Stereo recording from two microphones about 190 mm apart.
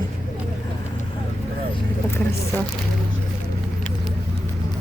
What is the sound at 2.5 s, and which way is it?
Speech, 10° left (ahead or behind).